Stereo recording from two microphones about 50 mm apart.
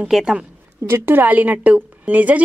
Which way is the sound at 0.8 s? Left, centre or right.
Right.